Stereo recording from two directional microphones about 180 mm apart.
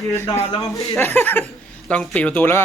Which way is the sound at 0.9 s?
10° left (ahead or behind).